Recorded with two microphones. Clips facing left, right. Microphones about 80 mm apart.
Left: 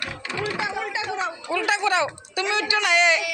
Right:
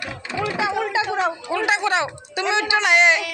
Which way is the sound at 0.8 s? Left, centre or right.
Right.